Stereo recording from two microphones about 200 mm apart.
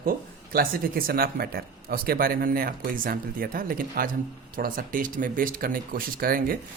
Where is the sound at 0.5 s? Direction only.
45° right (ahead or behind).